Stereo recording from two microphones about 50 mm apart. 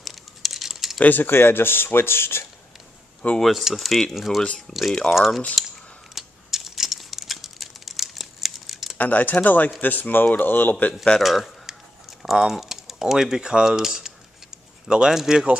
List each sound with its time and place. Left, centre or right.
0.0 s typing: centre
0.9 s speech: left
3.3 s speech: centre
4.4 s speech: centre
5.1 s speech: centre
6.1 s typing: centre
8.9 s speech: left
11.1 s typing: centre
14.9 s speech: centre